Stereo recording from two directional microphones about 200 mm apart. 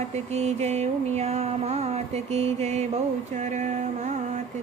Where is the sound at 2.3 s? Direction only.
30° right (ahead or behind).